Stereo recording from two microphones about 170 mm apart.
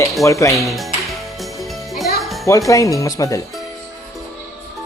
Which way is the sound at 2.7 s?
20° left (ahead or behind).